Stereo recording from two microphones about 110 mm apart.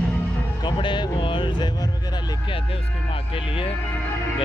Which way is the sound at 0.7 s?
45° left (ahead or behind).